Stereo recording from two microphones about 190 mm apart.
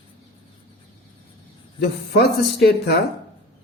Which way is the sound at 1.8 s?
60° left (ahead or behind).